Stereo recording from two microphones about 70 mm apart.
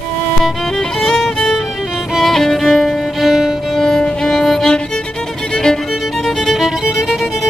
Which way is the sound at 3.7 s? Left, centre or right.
Centre.